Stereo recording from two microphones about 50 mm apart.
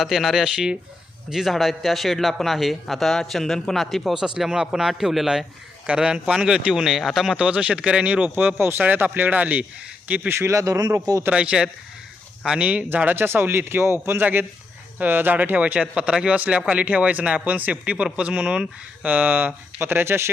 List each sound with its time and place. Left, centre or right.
0.0 s a man's voice: centre
5.8 s speech: right; by 7.3 s centre
7.3 s speech: right
10.2 s speech: right
11.3 s speech: right
13.1 s speech: right
14.2 s speech: right; by 18.7 s centre
19.0 s speech: right
19.8 s speech: right